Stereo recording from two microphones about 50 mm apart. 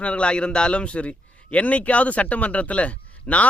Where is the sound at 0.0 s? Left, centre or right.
Left.